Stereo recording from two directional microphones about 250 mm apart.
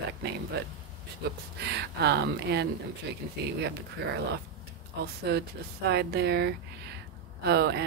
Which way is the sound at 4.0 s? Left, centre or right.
Right.